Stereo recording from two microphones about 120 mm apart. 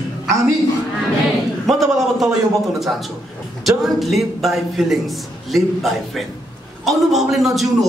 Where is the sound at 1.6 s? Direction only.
Centre (ahead or behind).